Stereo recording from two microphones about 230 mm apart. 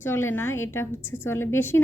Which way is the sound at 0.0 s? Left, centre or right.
Centre.